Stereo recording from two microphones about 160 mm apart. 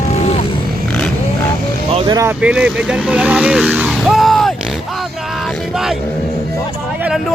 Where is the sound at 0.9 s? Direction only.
5° left (ahead or behind).